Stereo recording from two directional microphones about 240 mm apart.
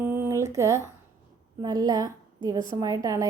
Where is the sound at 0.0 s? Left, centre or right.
Centre.